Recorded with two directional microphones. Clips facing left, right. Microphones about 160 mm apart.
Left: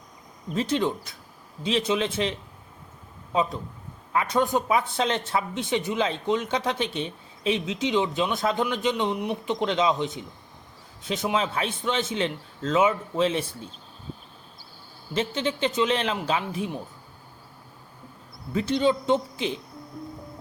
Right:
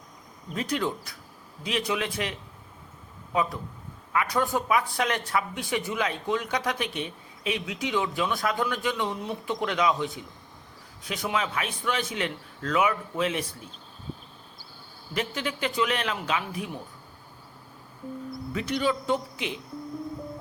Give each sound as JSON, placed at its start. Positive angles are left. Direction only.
{"t": 0.5, "sound": "speech", "side_deg": 25}
{"t": 4.1, "sound": "speech", "side_deg": 25}
{"t": 15.1, "sound": "speech", "side_deg": 25}
{"t": 18.5, "sound": "speech", "side_deg": 25}